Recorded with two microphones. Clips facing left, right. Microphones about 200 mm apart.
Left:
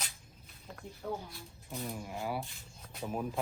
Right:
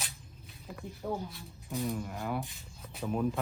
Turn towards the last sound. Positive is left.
turn(degrees=5)  # may be behind; listen again after turning